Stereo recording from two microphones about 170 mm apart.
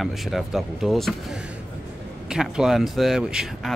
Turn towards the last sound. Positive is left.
turn(degrees=-5)  # may be behind; listen again after turning